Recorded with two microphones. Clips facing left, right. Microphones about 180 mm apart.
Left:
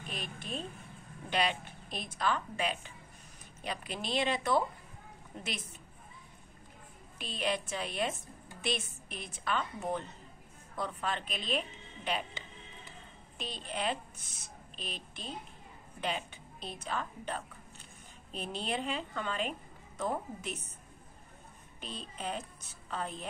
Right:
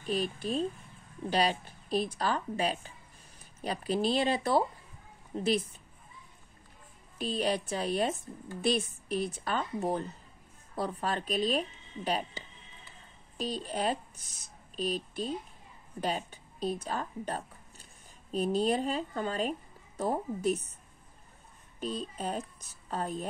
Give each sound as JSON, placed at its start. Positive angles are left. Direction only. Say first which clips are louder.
{"t": 0.0, "sound": "speech", "louder": "right 11 dB", "side_deg": -35}
{"t": 7.2, "sound": "speech", "louder": "right 5 dB", "side_deg": -35}
{"t": 21.7, "sound": "speech", "louder": "right 9 dB", "side_deg": -40}